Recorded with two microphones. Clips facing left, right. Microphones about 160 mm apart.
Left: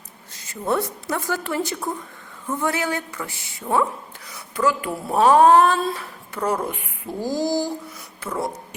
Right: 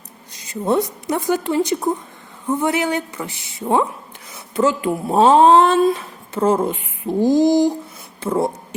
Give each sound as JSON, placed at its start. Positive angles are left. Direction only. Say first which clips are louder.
{"t": 0.3, "sound": "a woman's voice", "louder": "right 5 dB", "side_deg": -20}